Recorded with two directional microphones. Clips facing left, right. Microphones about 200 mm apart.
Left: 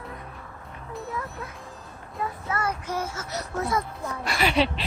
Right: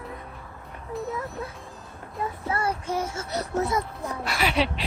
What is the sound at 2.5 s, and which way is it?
Speech, 30° right (ahead or behind).